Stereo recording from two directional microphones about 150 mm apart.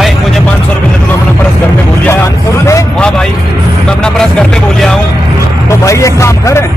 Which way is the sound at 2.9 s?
5° left (ahead or behind).